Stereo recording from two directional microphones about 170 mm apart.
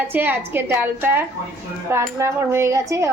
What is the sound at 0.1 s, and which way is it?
Speech, 10° right (ahead or behind).